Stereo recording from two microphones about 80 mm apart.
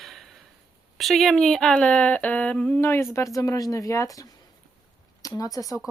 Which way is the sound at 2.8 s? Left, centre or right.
Left.